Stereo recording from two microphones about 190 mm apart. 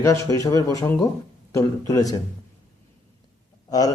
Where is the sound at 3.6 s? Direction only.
20° left (ahead or behind).